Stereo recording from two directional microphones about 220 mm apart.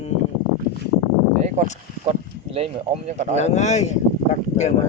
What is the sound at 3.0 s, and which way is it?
Speech, 30° right (ahead or behind).